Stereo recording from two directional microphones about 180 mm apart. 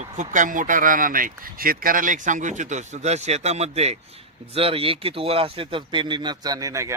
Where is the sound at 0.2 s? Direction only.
45° right (ahead or behind).